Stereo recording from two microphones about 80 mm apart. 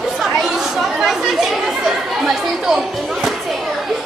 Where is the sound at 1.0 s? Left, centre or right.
Centre.